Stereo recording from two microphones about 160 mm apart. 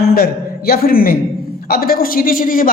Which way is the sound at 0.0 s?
70° left (ahead or behind).